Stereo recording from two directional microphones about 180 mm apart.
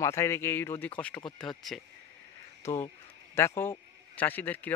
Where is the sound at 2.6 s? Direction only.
15° left (ahead or behind).